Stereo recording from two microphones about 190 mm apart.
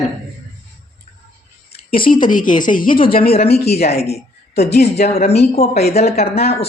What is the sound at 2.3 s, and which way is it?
Speech, 45° left (ahead or behind).